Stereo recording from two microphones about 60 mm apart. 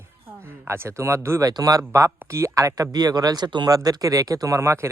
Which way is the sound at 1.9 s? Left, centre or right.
Right.